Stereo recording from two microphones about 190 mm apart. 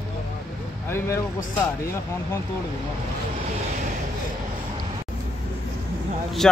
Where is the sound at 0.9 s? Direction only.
15° left (ahead or behind).